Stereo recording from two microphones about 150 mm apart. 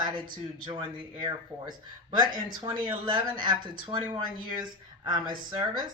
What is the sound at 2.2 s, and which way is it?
Speech, 30° right (ahead or behind).